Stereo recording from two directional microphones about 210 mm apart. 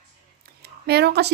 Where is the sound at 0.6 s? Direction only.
50° right (ahead or behind).